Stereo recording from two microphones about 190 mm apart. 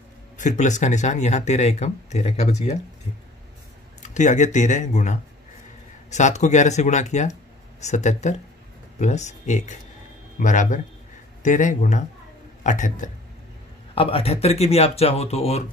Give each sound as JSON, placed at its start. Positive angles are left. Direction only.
{"t": 0.4, "sound": "speech", "side_deg": 40}
{"t": 4.0, "sound": "speech", "side_deg": 40}